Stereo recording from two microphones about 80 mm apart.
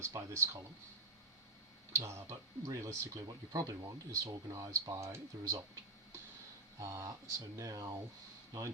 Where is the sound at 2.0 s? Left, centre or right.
Right.